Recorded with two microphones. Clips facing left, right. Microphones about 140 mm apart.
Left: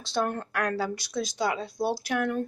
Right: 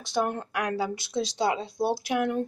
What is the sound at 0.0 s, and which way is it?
Speech, 15° right (ahead or behind).